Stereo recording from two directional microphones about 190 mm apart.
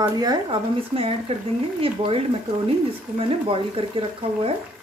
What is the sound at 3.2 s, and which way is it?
Speech, 30° right (ahead or behind).